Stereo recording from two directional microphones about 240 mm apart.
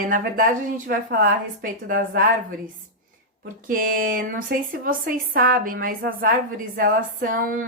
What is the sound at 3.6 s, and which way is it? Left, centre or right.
Speech, right.